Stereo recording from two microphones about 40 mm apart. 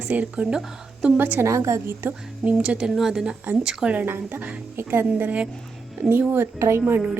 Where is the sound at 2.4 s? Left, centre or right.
Right.